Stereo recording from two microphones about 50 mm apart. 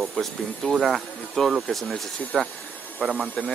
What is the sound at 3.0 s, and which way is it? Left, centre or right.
Speech, right.